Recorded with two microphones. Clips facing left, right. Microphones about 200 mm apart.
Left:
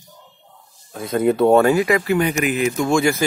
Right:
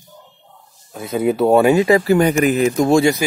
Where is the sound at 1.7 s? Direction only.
30° right (ahead or behind).